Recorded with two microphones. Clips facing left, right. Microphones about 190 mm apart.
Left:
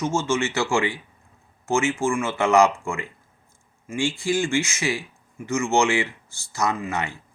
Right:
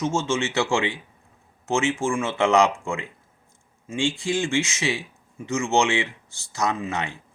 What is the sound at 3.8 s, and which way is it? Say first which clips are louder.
Speech: even; 25° right (ahead or behind).